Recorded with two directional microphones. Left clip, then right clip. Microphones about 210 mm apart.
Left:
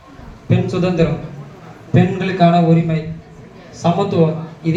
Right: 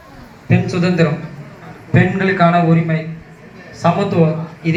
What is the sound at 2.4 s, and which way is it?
Speech, 20° right (ahead or behind).